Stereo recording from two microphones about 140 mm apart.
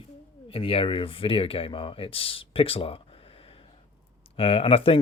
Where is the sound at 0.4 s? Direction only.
40° left (ahead or behind).